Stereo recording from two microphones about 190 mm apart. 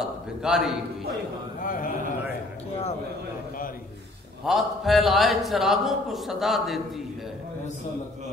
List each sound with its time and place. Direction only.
0.0 s a man's voice: centre (ahead or behind)
1.6 s a man's voice: 45° left (ahead or behind)
4.5 s a man's voice: centre (ahead or behind)